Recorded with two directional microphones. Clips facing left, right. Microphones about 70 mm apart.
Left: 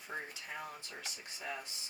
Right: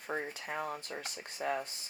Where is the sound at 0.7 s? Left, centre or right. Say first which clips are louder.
Right 6 dB; right.